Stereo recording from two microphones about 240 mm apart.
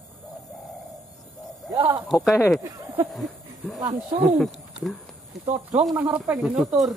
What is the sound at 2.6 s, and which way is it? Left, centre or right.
Speech, right.